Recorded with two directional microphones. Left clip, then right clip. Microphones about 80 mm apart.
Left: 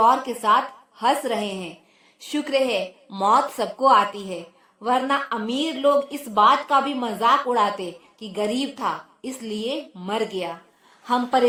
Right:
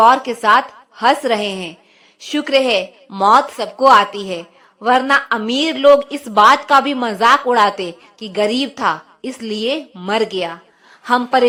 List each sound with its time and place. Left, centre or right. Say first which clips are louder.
0.3 s a woman's voice: right 6 dB; right
2.2 s a woman's voice: right 7 dB; right
6.3 s a woman's voice: right 7 dB; right